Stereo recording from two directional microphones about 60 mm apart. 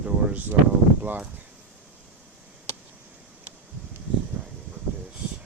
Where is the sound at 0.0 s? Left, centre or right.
Right.